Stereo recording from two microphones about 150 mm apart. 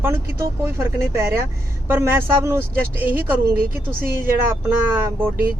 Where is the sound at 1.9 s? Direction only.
15° right (ahead or behind).